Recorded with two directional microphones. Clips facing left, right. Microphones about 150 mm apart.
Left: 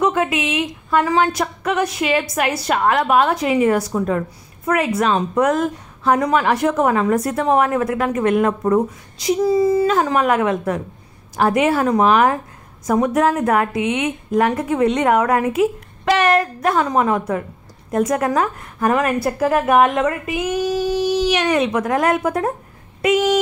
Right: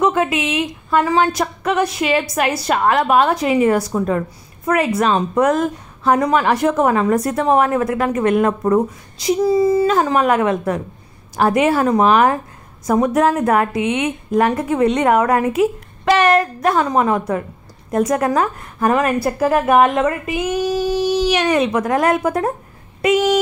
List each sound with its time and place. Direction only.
0.0 s a woman's voice: 30° right (ahead or behind)